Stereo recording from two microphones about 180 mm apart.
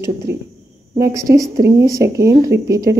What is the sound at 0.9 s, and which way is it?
Speech, 15° right (ahead or behind).